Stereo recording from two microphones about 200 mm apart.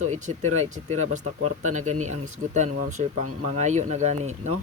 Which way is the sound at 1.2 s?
90° right.